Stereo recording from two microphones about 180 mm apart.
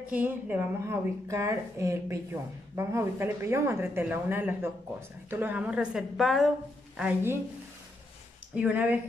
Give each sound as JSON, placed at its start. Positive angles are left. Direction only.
{"t": 0.1, "sound": "a woman's voice", "side_deg": -10}
{"t": 8.5, "sound": "speech", "side_deg": -10}